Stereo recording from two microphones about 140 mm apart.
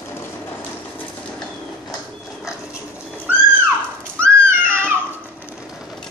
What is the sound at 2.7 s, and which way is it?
Dog, 5° right (ahead or behind).